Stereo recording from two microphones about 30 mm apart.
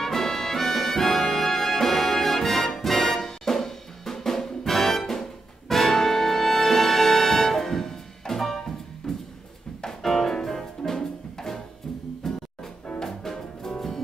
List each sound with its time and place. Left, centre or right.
0.0 s music: centre
9.1 s music: left
9.8 s music: centre